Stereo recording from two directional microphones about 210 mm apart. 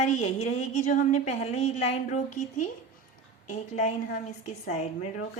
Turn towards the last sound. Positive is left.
turn(degrees=35)  # may be behind; listen again after turning